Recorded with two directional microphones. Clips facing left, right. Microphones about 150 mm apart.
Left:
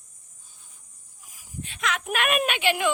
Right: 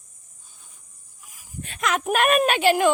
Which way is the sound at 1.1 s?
60° right (ahead or behind).